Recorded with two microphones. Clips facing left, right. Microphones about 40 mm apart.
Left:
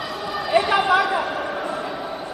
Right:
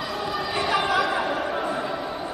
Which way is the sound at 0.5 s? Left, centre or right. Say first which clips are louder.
Left 7 dB; centre.